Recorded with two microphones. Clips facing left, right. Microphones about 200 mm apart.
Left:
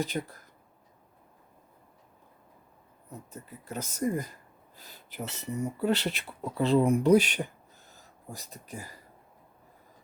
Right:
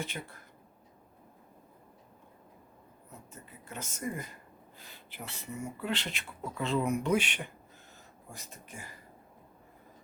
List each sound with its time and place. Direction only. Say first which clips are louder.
0.0 s speech: left 8 dB; 35° left (ahead or behind)
3.7 s speech: left 8 dB; 40° left (ahead or behind)
7.9 s a sound: left 6 dB; 35° left (ahead or behind)